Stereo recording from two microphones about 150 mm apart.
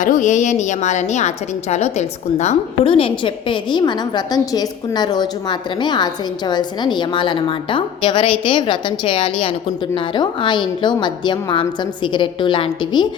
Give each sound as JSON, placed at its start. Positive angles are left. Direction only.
{"t": 0.0, "sound": "a woman's voice", "side_deg": 55}
{"t": 2.9, "sound": "a woman's voice", "side_deg": 35}